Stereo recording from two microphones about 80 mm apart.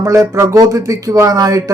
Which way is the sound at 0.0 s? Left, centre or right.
Right.